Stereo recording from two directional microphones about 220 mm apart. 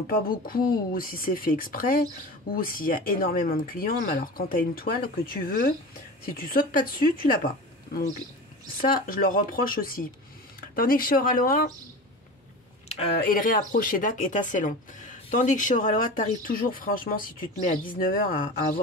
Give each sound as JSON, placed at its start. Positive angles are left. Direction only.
{"t": 0.0, "sound": "speech", "side_deg": 40}
{"t": 8.8, "sound": "speech", "side_deg": 40}
{"t": 13.3, "sound": "speech", "side_deg": 40}